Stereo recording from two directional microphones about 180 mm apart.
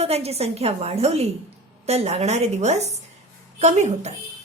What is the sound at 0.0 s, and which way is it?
A woman's voice, 35° right (ahead or behind).